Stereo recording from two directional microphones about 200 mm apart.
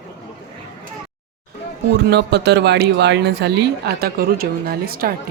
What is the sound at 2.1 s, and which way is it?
Speech, 55° right (ahead or behind).